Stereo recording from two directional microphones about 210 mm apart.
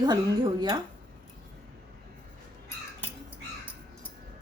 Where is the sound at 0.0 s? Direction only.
20° right (ahead or behind).